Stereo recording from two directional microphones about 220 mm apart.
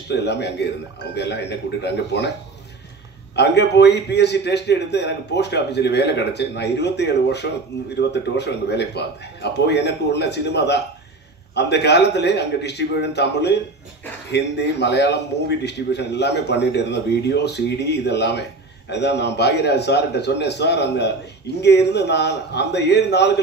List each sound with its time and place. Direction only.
0.1 s a man's voice: 50° left (ahead or behind)
3.3 s a man's voice: 50° left (ahead or behind)